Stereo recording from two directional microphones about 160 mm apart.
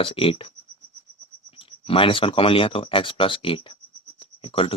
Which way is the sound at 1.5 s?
35° left (ahead or behind).